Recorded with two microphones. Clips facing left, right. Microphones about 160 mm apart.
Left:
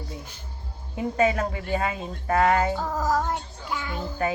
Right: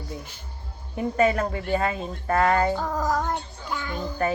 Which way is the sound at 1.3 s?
40° right (ahead or behind).